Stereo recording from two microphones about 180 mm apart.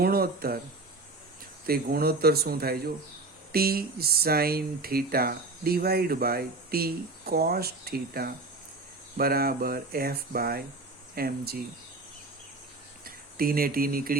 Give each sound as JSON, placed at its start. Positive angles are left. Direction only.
{"t": 0.0, "sound": "speech", "side_deg": -55}
{"t": 1.6, "sound": "speech", "side_deg": -55}
{"t": 13.1, "sound": "speech", "side_deg": -55}